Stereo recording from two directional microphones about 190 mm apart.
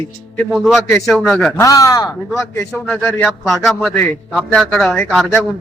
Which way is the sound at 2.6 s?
5° left (ahead or behind).